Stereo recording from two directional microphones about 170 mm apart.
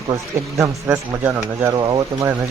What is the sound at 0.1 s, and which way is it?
Speech, 20° right (ahead or behind).